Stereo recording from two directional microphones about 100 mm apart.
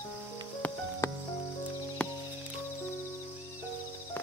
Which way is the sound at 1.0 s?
30° left (ahead or behind).